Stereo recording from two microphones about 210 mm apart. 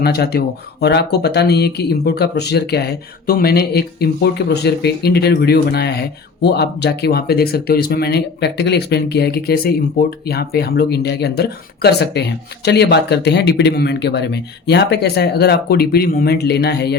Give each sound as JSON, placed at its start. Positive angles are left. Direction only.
{"t": 0.0, "sound": "speech", "side_deg": 50}